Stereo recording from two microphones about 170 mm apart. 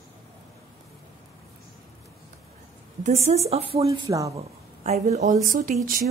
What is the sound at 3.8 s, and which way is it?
Speech, 20° right (ahead or behind).